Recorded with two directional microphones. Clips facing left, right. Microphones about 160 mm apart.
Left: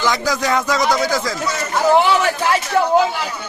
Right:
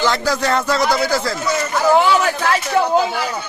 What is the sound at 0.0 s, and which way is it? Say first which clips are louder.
A man's voice: right 1 dB; 15° left (ahead or behind).